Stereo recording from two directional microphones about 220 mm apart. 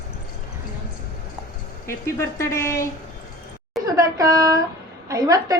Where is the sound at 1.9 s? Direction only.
10° left (ahead or behind).